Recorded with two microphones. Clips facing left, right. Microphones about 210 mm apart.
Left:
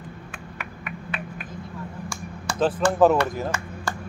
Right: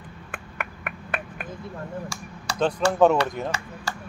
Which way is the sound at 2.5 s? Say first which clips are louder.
Left 1 dB; 50° left (ahead or behind).